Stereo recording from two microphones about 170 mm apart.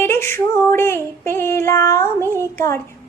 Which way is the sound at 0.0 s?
15° left (ahead or behind).